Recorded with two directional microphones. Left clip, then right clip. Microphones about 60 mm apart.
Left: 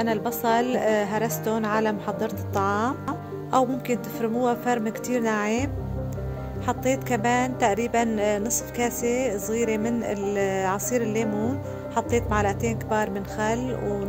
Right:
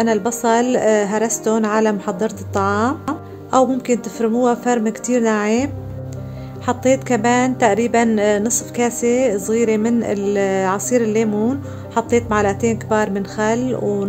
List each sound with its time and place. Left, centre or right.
0.0 s a woman's voice: left
6.6 s a woman's voice: left